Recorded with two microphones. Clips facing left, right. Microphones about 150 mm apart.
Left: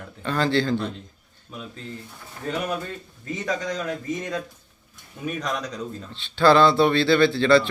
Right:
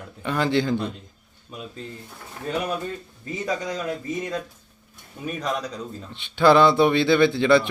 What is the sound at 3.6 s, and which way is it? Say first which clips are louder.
A man's voice: even; 5° right (ahead or behind).